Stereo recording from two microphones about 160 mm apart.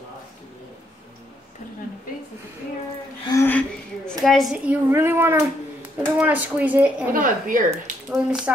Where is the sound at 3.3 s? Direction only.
15° left (ahead or behind); by 5.4 s 15° right (ahead or behind).